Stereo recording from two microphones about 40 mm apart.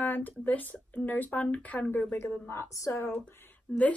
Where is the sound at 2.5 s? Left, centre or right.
Left.